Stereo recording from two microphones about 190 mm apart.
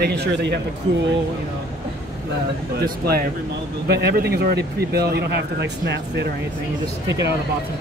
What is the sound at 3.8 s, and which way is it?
Speech, 60° right (ahead or behind).